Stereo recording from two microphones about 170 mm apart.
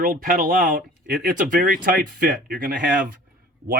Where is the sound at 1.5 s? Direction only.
55° right (ahead or behind).